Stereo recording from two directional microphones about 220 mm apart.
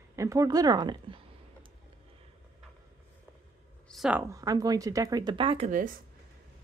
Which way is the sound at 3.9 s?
5° right (ahead or behind).